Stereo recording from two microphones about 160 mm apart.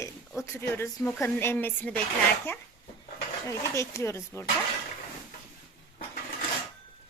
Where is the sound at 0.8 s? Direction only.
15° left (ahead or behind).